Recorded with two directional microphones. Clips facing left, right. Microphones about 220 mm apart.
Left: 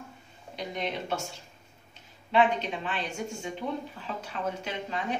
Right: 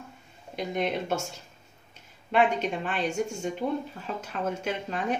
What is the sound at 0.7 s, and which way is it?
Speech, 45° right (ahead or behind).